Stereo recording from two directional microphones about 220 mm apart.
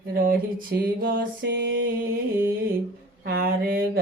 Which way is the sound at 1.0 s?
45° right (ahead or behind).